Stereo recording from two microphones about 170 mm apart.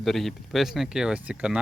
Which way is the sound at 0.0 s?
Centre (ahead or behind).